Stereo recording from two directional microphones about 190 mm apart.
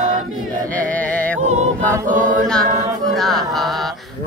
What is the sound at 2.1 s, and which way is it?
Chant, 45° right (ahead or behind).